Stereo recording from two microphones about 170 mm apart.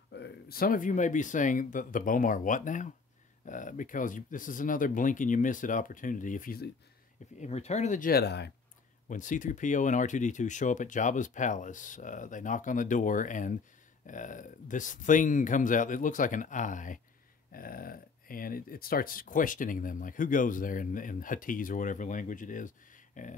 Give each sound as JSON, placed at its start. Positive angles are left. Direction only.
{"t": 0.1, "sound": "speech", "side_deg": 75}
{"t": 7.3, "sound": "speech", "side_deg": 40}
{"t": 9.1, "sound": "speech", "side_deg": 50}